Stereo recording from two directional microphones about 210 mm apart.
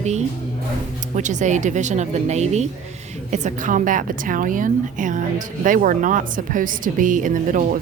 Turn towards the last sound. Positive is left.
turn(degrees=-40)  # may be behind; listen again after turning